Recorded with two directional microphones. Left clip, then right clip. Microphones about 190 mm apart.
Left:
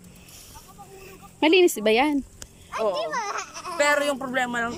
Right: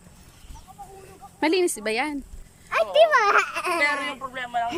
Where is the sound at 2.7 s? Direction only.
45° right (ahead or behind).